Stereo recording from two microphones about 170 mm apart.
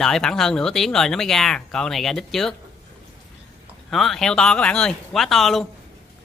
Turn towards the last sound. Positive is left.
turn(degrees=0)  # may be behind; listen again after turning